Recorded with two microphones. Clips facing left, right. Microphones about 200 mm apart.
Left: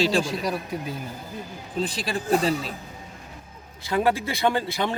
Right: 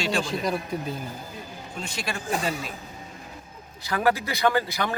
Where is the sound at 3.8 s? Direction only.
25° left (ahead or behind).